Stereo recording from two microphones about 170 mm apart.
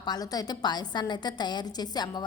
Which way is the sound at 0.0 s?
25° left (ahead or behind).